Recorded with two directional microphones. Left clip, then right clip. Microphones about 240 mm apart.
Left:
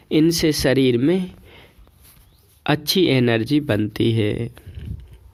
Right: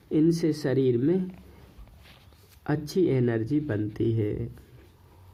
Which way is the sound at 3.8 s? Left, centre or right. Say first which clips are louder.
Left 7 dB; left.